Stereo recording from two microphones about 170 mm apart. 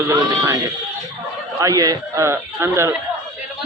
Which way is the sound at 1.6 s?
20° right (ahead or behind).